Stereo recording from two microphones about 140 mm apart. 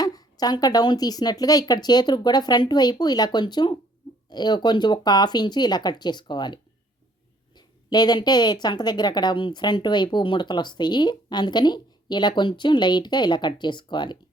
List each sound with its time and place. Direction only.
0.0 s speech: 25° left (ahead or behind)